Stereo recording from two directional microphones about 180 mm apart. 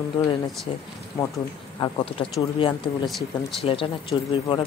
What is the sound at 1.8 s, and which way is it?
Speech, 30° left (ahead or behind).